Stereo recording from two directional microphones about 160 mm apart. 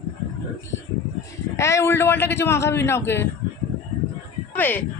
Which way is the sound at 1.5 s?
20° left (ahead or behind).